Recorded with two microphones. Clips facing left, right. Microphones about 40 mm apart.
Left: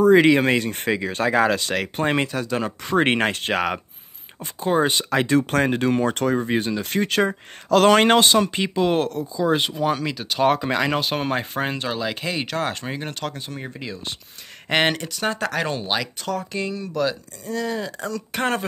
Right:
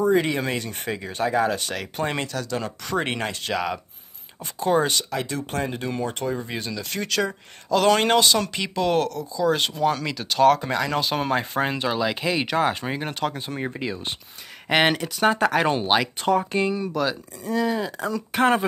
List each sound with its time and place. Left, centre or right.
0.0 s speech: left
2.0 s speech: left
3.0 s speech: left
4.7 s speech: centre
5.1 s speech: left
6.5 s speech: left
8.4 s speech: left
9.5 s speech: centre
10.6 s speech: left
11.0 s speech: centre
14.7 s speech: centre
16.9 s speech: centre